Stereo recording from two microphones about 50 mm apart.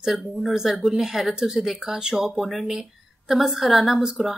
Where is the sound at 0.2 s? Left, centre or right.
Centre.